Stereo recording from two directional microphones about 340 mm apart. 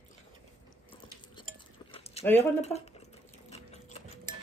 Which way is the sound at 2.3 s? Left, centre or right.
Centre.